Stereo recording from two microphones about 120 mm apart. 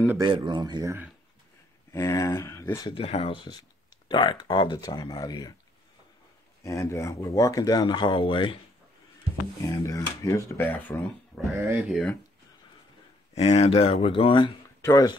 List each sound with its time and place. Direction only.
0.2 s speech: 40° right (ahead or behind)
1.9 s speech: 25° left (ahead or behind)
3.0 s speech: 55° left (ahead or behind)
4.1 s speech: 40° left (ahead or behind)
6.6 s speech: 25° left (ahead or behind); by 8.5 s 45° left (ahead or behind)
9.6 s speech: 30° left (ahead or behind); by 11.1 s 15° left (ahead or behind)
11.5 s speech: 20° right (ahead or behind)
11.8 s speech: centre (ahead or behind)
13.3 s speech: 60° left (ahead or behind)
14.8 s speech: 30° left (ahead or behind)